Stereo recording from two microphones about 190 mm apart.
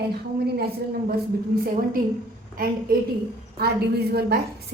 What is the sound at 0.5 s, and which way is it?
Speech, 55° right (ahead or behind).